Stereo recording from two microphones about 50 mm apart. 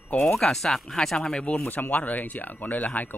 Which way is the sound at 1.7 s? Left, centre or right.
Left.